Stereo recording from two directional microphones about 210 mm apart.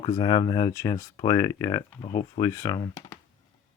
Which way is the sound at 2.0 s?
35° left (ahead or behind).